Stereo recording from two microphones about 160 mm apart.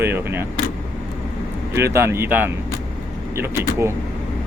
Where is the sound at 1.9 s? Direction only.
15° right (ahead or behind).